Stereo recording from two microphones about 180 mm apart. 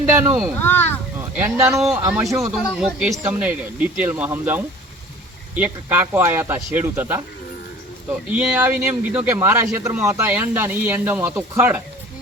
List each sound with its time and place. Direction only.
0.0 s a sound: 15° right (ahead or behind)
0.6 s speech: 10° left (ahead or behind)
1.4 s a man's voice: 15° right (ahead or behind)
2.4 s a man's voice: centre (ahead or behind)
8.3 s a man's voice: 10° right (ahead or behind)